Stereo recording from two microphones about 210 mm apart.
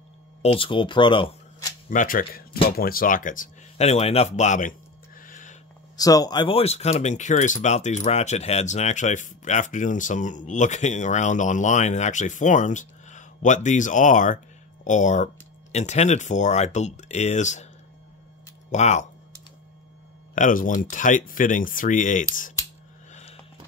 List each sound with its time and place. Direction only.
0.4 s speech: 25° left (ahead or behind)
1.9 s speech: 40° left (ahead or behind)
5.2 s a sound: 40° left (ahead or behind)
5.9 s speech: 15° left (ahead or behind); by 17.6 s 35° left (ahead or behind)
18.7 s speech: 35° left (ahead or behind)
20.3 s speech: 40° left (ahead or behind)
23.1 s a sound: 30° left (ahead or behind)